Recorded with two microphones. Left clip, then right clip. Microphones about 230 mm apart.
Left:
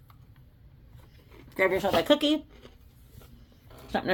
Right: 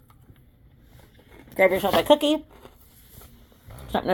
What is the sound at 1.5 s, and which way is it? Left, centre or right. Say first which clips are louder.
Speech: right 5 dB; centre.